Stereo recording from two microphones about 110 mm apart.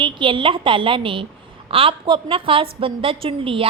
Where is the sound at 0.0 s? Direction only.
50° right (ahead or behind).